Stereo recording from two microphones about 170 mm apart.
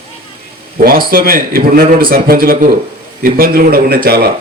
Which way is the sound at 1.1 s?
60° right (ahead or behind).